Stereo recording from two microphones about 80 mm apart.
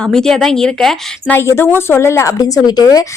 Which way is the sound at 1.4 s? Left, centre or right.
Left.